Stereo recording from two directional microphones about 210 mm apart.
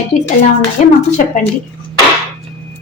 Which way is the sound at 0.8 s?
35° left (ahead or behind).